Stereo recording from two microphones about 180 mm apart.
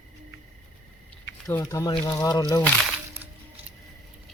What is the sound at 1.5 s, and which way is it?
Speech, 15° left (ahead or behind).